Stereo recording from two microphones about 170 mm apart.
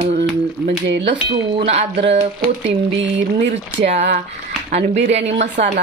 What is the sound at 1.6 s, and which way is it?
Speech, 40° right (ahead or behind).